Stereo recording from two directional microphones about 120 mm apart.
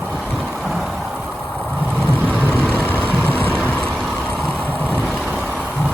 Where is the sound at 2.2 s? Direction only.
15° right (ahead or behind).